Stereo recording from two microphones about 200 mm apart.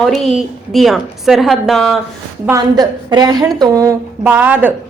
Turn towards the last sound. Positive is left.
turn(degrees=-10)  # may be behind; listen again after turning